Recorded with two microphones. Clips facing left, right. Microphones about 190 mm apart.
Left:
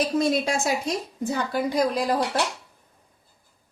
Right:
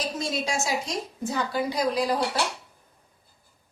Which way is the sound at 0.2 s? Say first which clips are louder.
Left 6 dB; 55° left (ahead or behind).